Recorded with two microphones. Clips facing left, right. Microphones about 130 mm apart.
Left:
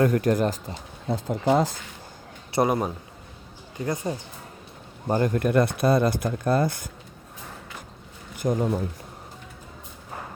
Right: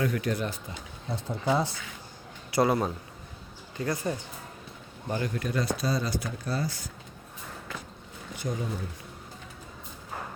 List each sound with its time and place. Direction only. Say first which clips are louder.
0.0 s speech: left 8 dB; 45° left (ahead or behind)
2.5 s a man's voice: left 2 dB; 20° left (ahead or behind)
5.0 s speech: left 8 dB; 45° left (ahead or behind)
8.4 s speech: left 9 dB; 55° left (ahead or behind)